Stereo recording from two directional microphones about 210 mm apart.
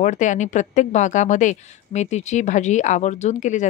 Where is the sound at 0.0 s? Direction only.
35° left (ahead or behind).